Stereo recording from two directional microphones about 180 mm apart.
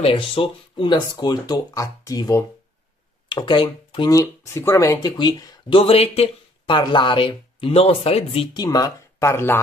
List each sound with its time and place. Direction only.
0.0 s speech: 30° left (ahead or behind)
8.6 s speech: 20° left (ahead or behind)